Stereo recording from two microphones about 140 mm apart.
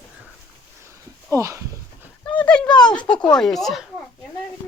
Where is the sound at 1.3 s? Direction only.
25° right (ahead or behind).